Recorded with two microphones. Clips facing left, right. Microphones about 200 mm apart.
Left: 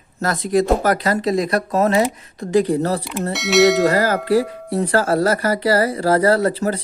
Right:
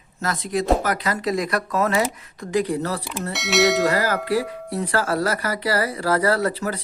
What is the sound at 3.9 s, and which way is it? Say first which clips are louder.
Tubular bells: left 4 dB; 35° left (ahead or behind).